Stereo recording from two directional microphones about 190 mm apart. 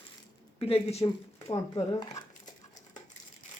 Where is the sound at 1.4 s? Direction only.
20° left (ahead or behind).